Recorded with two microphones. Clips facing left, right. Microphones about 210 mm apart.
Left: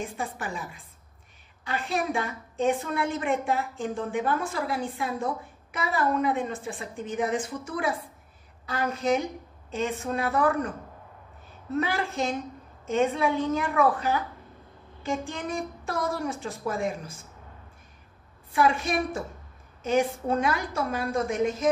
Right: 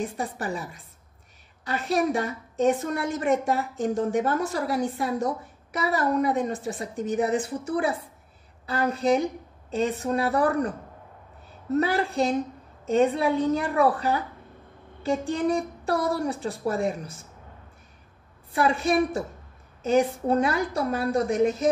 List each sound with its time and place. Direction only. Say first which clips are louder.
0.0 s a woman's voice: right 3 dB; 40° right (ahead or behind)
11.7 s a woman's voice: right 4 dB; 35° right (ahead or behind)
18.5 s a woman's voice: right 2 dB; 35° right (ahead or behind)